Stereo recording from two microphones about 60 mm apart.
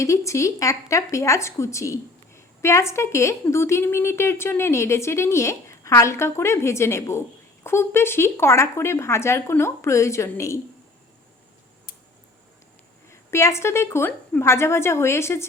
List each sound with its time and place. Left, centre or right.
0.0 s a woman's voice: left
13.1 s a woman's voice: left